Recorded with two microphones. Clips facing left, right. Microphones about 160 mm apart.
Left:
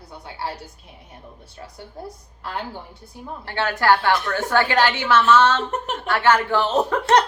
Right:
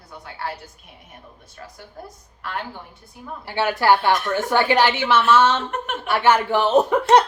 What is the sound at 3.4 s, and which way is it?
A woman's voice, 10° right (ahead or behind).